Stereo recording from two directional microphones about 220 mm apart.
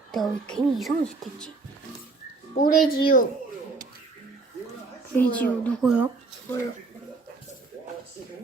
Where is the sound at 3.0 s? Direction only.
40° left (ahead or behind).